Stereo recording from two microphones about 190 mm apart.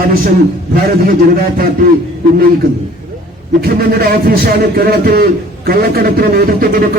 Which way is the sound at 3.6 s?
50° right (ahead or behind).